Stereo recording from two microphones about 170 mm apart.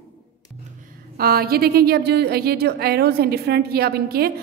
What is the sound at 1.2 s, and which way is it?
A woman's voice, 65° right (ahead or behind).